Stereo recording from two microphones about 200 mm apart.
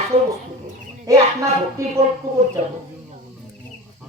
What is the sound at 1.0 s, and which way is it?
Speech, 15° right (ahead or behind).